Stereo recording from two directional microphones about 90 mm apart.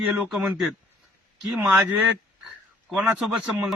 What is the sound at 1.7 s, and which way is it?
Speech, 15° right (ahead or behind).